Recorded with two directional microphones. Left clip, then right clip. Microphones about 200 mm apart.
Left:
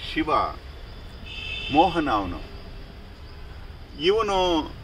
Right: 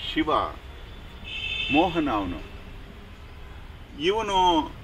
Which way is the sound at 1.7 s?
25° right (ahead or behind).